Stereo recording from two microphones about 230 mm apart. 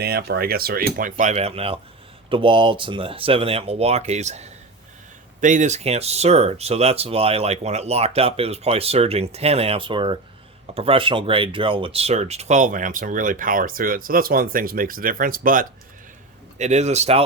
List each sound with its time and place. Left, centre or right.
0.0 s speech: right